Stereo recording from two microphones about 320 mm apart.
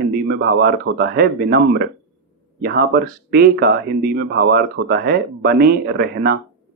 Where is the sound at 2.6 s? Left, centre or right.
Right.